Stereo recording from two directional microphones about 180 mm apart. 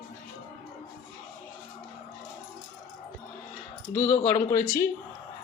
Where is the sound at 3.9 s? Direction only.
35° left (ahead or behind).